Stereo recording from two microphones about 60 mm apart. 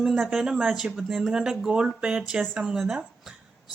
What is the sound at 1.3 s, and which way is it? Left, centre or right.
Speech, centre.